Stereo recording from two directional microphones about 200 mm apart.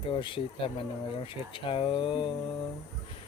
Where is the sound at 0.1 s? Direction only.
25° left (ahead or behind).